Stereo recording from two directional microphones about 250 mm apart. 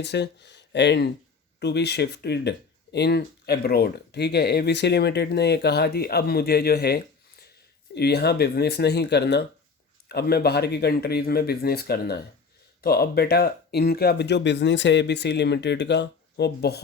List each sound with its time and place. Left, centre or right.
0.0 s speech: left